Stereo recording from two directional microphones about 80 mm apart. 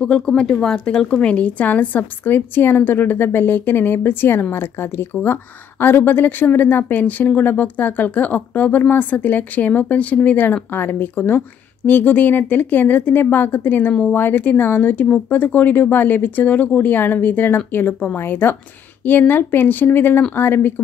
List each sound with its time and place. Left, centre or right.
0.0 s a woman's voice: centre; by 20.8 s left